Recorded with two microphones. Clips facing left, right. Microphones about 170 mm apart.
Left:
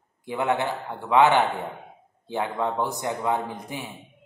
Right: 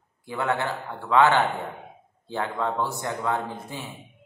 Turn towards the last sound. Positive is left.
turn(degrees=15)  # may be behind; listen again after turning